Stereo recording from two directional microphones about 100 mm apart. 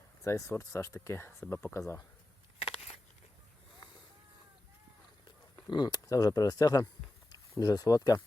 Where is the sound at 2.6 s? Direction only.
85° left.